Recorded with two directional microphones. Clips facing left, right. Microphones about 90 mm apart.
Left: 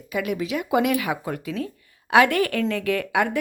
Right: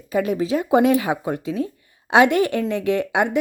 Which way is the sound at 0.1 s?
30° right (ahead or behind).